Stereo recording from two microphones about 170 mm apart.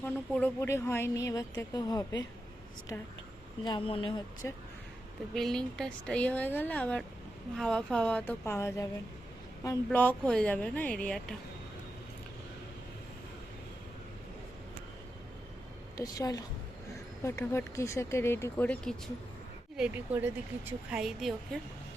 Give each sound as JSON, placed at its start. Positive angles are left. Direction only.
{"t": 0.0, "sound": "a woman's voice", "side_deg": 10}
{"t": 3.6, "sound": "a woman's voice", "side_deg": 30}
{"t": 4.4, "sound": "speech", "side_deg": 15}
{"t": 5.3, "sound": "speech", "side_deg": 0}
{"t": 16.0, "sound": "a woman's voice", "side_deg": 20}
{"t": 19.7, "sound": "speech", "side_deg": -10}